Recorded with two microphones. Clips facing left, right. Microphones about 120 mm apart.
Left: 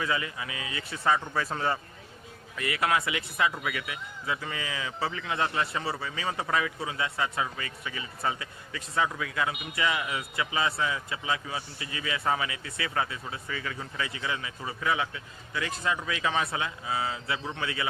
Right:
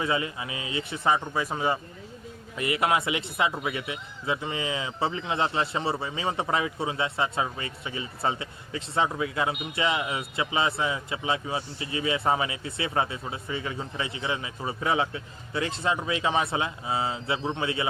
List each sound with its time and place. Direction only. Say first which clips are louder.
0.0 s speech: right 3 dB; 25° right (ahead or behind)